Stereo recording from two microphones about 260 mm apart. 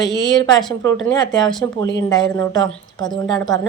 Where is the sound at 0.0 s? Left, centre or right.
Centre.